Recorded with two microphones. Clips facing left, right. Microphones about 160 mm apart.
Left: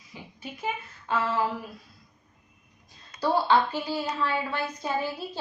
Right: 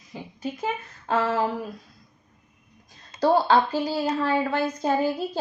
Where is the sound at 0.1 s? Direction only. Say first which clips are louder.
Right 9 dB; 40° right (ahead or behind).